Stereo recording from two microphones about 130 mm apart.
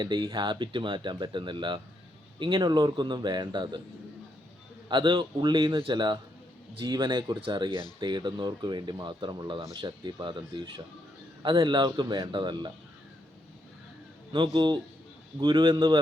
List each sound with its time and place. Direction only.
0.0 s speech: 35° right (ahead or behind)
4.9 s speech: 35° right (ahead or behind)
14.3 s speech: 35° right (ahead or behind)